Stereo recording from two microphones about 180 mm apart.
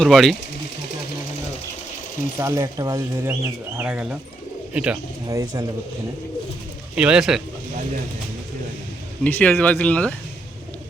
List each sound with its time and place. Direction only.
0.0 s speech: centre (ahead or behind)
2.4 s speech: 15° right (ahead or behind)
3.8 s speech: 5° right (ahead or behind)
5.3 s speech: 20° right (ahead or behind)
6.9 s speech: 5° right (ahead or behind)
9.2 s speech: 10° left (ahead or behind)